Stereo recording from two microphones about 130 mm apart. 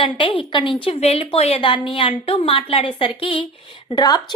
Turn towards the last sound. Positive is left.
turn(degrees=30)  # may be behind; listen again after turning